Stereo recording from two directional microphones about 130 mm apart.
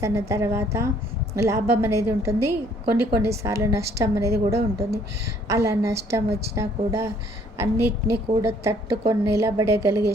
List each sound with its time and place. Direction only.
0.0 s a woman's voice: 20° right (ahead or behind)